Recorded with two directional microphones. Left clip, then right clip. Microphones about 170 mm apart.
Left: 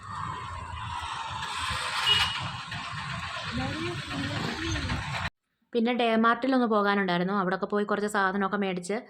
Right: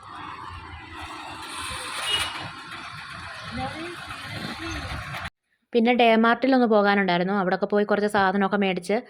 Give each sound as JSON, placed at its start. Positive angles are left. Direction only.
{"t": 5.7, "sound": "a woman's voice", "side_deg": -25}